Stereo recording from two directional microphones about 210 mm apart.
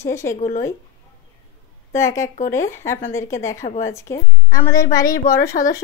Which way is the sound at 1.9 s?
15° left (ahead or behind).